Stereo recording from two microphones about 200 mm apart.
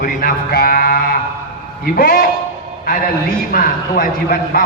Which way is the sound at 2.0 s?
50° left (ahead or behind).